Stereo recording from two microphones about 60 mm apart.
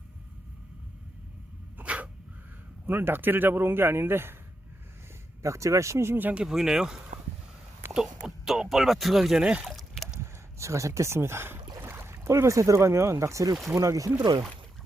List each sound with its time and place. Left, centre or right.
1.8 s dog: right
2.8 s speech: right
5.4 s speech: right
6.1 s speech: right
6.4 s speech: centre
9.4 s speech: centre
9.6 s a sound: centre
10.6 s speech: right